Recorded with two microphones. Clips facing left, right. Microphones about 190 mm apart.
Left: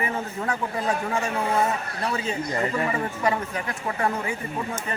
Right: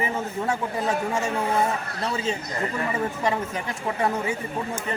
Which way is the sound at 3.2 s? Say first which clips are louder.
Even; 20° right (ahead or behind).